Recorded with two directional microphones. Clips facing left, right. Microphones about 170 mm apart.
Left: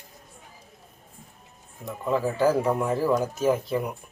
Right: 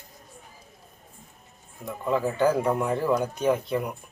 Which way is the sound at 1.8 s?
Centre (ahead or behind).